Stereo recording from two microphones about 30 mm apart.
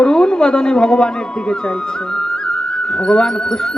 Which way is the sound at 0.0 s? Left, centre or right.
Left.